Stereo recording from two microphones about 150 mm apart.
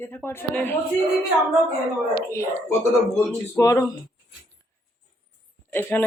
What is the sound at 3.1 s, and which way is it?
Speech, 20° left (ahead or behind).